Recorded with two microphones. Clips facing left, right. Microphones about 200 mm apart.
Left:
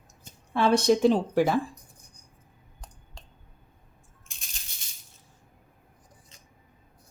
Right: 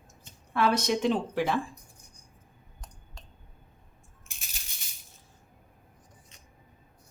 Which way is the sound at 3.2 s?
30° left (ahead or behind).